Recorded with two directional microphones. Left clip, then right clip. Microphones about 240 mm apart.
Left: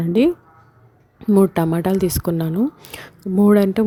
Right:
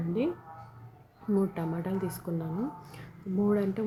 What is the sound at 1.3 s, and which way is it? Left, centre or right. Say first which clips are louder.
Speech: left 15 dB; left.